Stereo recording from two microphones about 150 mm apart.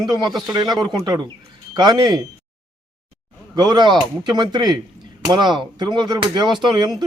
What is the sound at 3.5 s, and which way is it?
A man's voice, 30° right (ahead or behind).